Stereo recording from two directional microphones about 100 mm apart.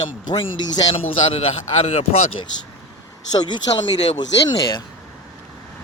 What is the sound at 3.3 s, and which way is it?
Speech, 45° left (ahead or behind).